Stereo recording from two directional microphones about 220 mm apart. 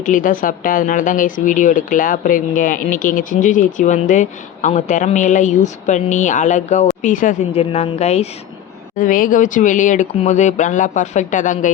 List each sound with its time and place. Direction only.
0.0 s speech: 35° left (ahead or behind)